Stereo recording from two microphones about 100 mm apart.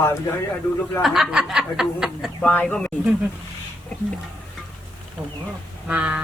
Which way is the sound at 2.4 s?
15° left (ahead or behind).